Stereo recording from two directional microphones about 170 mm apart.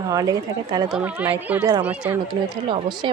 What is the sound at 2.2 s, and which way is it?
Speech, 25° right (ahead or behind).